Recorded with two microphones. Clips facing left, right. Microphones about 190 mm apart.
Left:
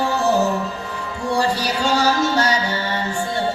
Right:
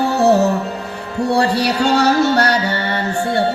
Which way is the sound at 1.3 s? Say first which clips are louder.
Right 4 dB; 65° right (ahead or behind).